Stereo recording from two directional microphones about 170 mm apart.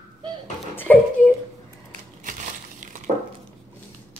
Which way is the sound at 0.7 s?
10° left (ahead or behind).